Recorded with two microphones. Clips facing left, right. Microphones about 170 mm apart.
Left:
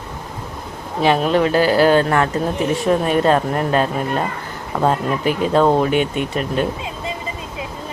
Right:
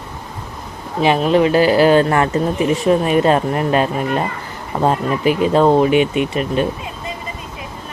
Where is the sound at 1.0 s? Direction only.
Centre (ahead or behind).